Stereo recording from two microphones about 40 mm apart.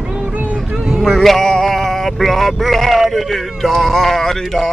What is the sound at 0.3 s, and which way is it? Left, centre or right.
Vehicle, right.